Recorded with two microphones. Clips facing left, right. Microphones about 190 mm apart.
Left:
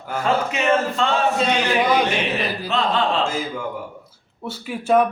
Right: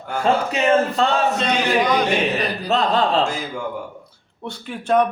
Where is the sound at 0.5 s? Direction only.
35° right (ahead or behind).